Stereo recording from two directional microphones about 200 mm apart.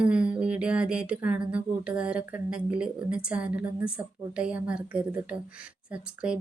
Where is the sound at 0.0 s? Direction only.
5° right (ahead or behind).